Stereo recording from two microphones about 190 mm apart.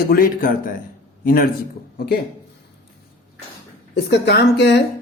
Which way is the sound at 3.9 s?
60° left (ahead or behind).